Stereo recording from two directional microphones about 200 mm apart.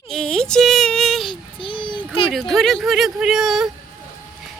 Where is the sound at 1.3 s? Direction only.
25° left (ahead or behind).